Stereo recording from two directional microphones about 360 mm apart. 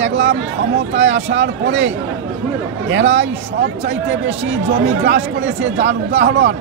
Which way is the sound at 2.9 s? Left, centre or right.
Right.